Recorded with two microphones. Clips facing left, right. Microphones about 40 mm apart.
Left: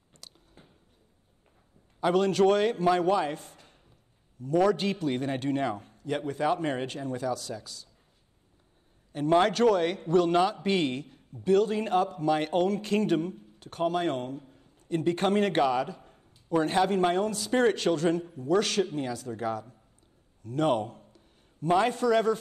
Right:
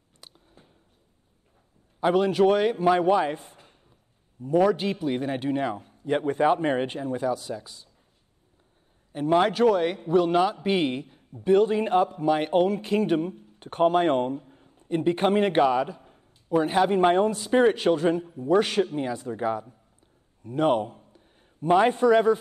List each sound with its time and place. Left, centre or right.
0.2 s a sound: right
2.0 s a man's voice: centre
5.9 s a sound: right
6.2 s speech: right
9.1 s a man's voice: centre
13.6 s a man's voice: right